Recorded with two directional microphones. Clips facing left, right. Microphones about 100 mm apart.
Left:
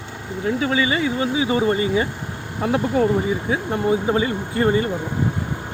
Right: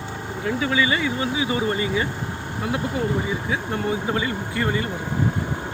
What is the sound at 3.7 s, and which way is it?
Speech, 25° left (ahead or behind).